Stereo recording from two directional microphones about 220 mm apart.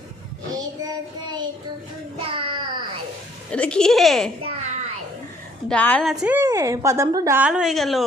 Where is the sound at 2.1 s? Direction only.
25° right (ahead or behind).